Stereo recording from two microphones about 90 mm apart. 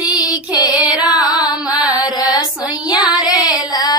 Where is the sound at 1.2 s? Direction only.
45° left (ahead or behind).